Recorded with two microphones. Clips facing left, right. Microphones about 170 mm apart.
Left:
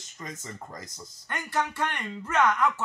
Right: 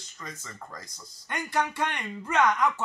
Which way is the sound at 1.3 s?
15° right (ahead or behind).